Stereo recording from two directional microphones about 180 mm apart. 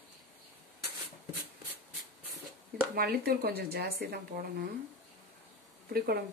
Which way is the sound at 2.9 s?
55° right (ahead or behind).